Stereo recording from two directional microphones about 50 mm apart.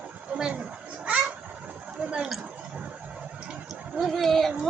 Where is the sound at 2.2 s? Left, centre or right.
Centre.